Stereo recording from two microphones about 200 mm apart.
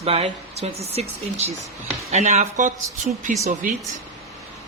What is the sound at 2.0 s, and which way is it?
A woman's voice, 35° right (ahead or behind).